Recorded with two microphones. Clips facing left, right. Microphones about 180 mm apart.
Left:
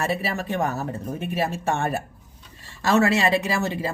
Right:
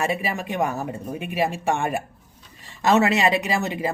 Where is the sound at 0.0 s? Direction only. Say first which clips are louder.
Right 1 dB; 15° right (ahead or behind).